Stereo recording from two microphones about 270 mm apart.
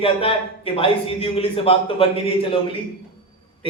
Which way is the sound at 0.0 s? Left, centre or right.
Left.